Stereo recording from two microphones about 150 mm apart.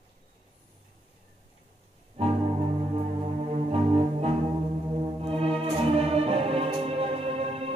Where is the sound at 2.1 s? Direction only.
40° right (ahead or behind).